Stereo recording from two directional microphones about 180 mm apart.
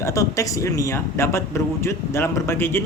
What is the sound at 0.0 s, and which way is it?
Speech, 15° left (ahead or behind).